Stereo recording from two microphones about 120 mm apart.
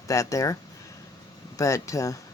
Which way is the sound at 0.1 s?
25° left (ahead or behind).